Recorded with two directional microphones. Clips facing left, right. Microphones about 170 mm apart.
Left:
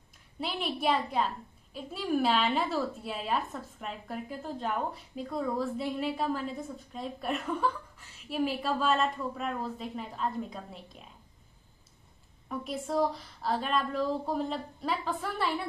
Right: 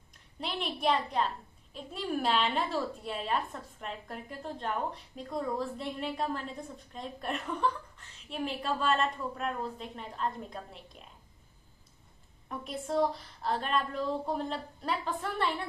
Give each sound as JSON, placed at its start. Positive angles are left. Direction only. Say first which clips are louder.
{"t": 0.4, "sound": "a woman's voice", "louder": "left 1 dB", "side_deg": 0}
{"t": 12.4, "sound": "a woman's voice", "louder": "left 2 dB", "side_deg": 0}